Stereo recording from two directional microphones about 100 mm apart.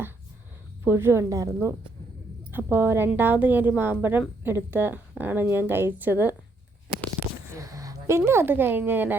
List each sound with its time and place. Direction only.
0.9 s speech: 25° right (ahead or behind)
2.5 s a woman's voice: 20° right (ahead or behind)
7.5 s speech: 35° right (ahead or behind); by 9.1 s 20° right (ahead or behind)